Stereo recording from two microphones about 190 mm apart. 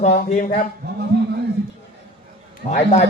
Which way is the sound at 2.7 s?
35° left (ahead or behind).